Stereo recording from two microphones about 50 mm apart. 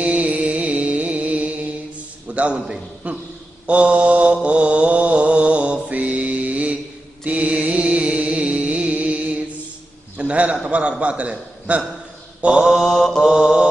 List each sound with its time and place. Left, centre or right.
0.0 s music: right
2.3 s a sound: right
3.0 s a man's voice: right
3.6 s mantra: right
7.2 s music: right
10.1 s a sound: right
10.7 s a man's voice: right
12.5 s mantra: centre
13.2 s mantra: centre